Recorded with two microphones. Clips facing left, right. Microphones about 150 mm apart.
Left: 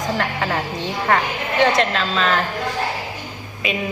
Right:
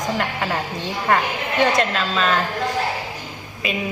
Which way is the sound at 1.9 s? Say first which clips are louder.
Left 1 dB; 5° right (ahead or behind).